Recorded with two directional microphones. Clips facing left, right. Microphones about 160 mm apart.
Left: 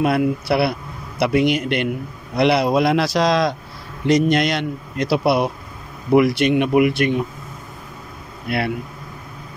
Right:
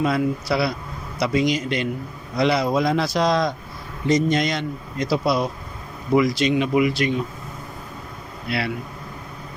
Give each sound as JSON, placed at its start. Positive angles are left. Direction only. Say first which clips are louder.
{"t": 0.0, "sound": "a man's voice", "louder": "left 3 dB", "side_deg": 60}
{"t": 4.0, "sound": "a man's voice", "louder": "left 3 dB", "side_deg": 70}
{"t": 8.5, "sound": "speech", "louder": "left 3 dB", "side_deg": 55}